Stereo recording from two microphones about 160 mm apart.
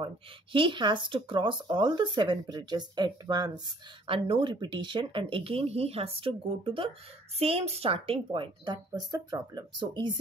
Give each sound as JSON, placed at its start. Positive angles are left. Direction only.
{"t": 0.0, "sound": "speech", "side_deg": -30}